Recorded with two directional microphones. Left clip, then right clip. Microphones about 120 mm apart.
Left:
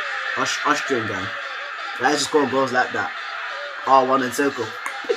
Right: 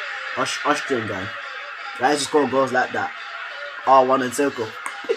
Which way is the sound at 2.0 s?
45° right (ahead or behind).